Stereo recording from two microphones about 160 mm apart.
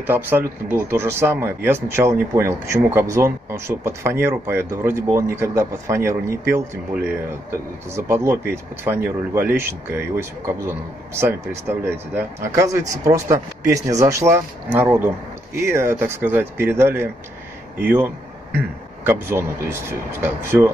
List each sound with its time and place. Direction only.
0.0 s speech: 15° right (ahead or behind)
7.9 s speech: 15° right (ahead or behind)
19.0 s speech: 15° right (ahead or behind)